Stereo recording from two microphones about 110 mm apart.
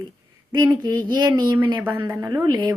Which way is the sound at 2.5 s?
40° right (ahead or behind).